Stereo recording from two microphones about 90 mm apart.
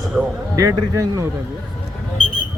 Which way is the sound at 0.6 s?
35° right (ahead or behind).